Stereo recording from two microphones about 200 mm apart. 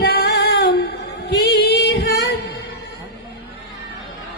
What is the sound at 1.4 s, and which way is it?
Singing, 55° left (ahead or behind).